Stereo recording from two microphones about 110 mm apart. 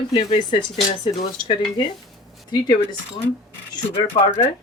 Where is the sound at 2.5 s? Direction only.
40° left (ahead or behind).